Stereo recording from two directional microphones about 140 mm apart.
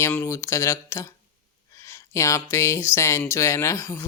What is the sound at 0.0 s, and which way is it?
Speech, 15° left (ahead or behind).